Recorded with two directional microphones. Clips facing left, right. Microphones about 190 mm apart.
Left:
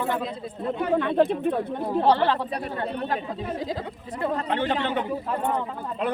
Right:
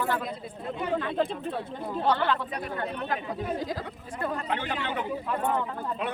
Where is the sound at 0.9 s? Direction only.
60° left (ahead or behind).